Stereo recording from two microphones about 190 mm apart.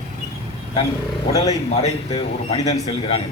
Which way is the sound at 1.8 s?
35° left (ahead or behind).